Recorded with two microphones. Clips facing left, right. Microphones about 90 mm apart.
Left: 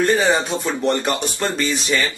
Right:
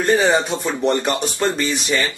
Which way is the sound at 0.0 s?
5° right (ahead or behind).